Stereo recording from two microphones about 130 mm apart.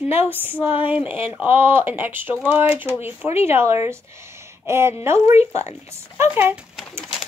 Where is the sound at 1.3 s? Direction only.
15° right (ahead or behind).